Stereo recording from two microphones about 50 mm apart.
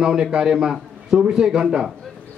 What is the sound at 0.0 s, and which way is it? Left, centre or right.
A man's voice, centre.